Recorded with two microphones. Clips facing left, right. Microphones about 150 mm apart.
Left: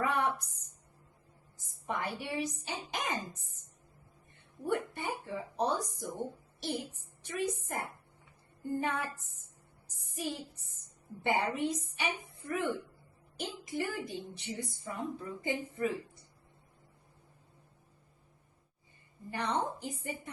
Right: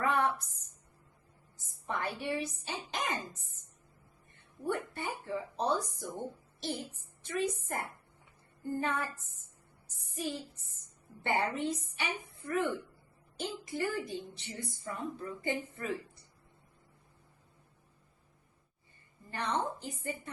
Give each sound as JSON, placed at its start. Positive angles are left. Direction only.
{"t": 0.0, "sound": "a sound", "side_deg": 15}
{"t": 1.5, "sound": "speech", "side_deg": 15}
{"t": 4.6, "sound": "speech", "side_deg": 15}
{"t": 19.3, "sound": "speech", "side_deg": 15}